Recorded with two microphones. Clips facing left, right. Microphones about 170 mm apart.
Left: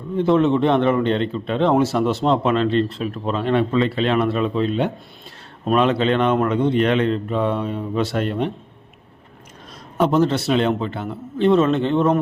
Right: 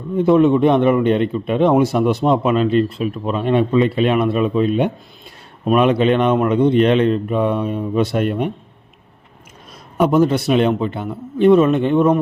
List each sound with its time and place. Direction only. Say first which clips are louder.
0.2 s a man's voice: right 4 dB; 15° right (ahead or behind)
10.0 s a man's voice: right 3 dB; 10° right (ahead or behind)